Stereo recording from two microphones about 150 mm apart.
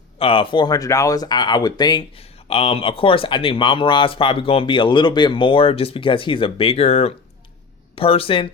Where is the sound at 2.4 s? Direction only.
40° left (ahead or behind).